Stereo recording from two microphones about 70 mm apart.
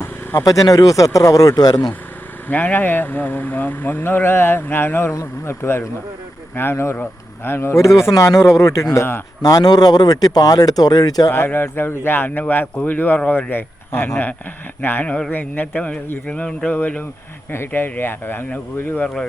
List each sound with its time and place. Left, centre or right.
0.0 s a sound: left
0.4 s speech: left
2.5 s speech: left
11.3 s speech: left
14.8 s speech: left
16.2 s a sound: centre
16.7 s speech: left